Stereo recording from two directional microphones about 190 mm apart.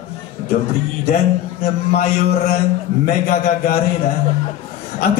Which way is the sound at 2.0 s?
35° left (ahead or behind).